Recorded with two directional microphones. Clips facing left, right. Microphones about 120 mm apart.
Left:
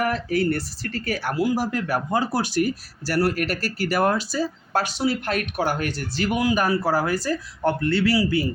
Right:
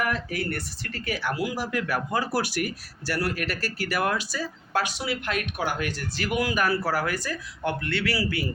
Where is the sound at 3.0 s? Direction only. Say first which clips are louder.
Left 6 dB; 40° left (ahead or behind).